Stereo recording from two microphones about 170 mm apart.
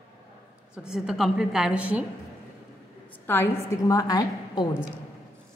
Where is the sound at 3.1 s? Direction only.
15° left (ahead or behind).